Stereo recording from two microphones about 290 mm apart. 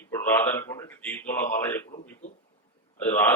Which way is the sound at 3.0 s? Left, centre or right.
Centre.